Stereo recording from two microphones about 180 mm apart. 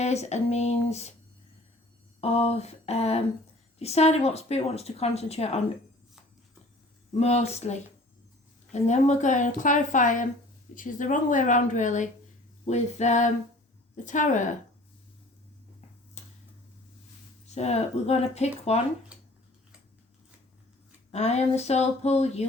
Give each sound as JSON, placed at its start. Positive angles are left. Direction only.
{"t": 0.0, "sound": "a woman's voice", "side_deg": 40}
{"t": 2.2, "sound": "a woman's voice", "side_deg": 35}
{"t": 7.1, "sound": "a woman's voice", "side_deg": 35}
{"t": 17.4, "sound": "a woman's voice", "side_deg": 40}
{"t": 21.1, "sound": "a woman's voice", "side_deg": 35}